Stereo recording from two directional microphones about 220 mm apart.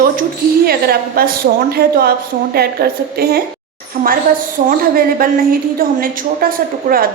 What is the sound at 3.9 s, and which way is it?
A woman's voice, 35° right (ahead or behind).